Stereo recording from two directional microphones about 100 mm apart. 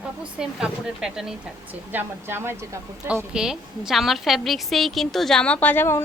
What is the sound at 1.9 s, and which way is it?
Speech, 20° right (ahead or behind).